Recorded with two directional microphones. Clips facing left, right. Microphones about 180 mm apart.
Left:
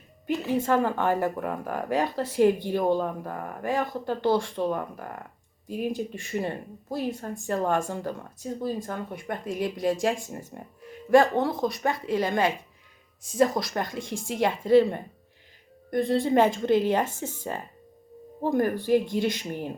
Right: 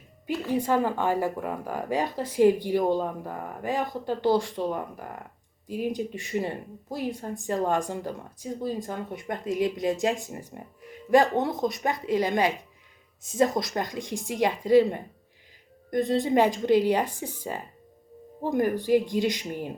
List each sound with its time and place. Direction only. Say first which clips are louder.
0.5 s speech: even; 15° right (ahead or behind)
5.6 s speech: even; 20° left (ahead or behind)
5.9 s speech: right 1 dB; 20° right (ahead or behind)